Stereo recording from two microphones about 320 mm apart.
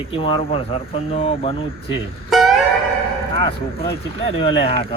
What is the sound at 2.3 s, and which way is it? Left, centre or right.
Music, centre.